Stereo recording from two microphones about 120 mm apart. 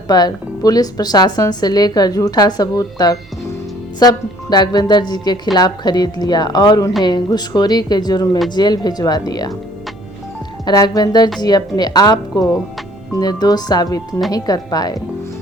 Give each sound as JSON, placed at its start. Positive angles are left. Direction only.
{"t": 0.1, "sound": "a woman's voice", "side_deg": 35}
{"t": 10.7, "sound": "a woman's voice", "side_deg": 35}